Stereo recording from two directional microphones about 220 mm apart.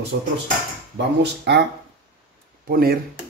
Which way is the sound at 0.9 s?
50° right (ahead or behind).